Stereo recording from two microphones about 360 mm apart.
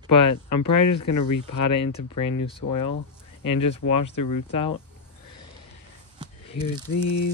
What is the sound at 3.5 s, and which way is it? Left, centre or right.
Speech, centre.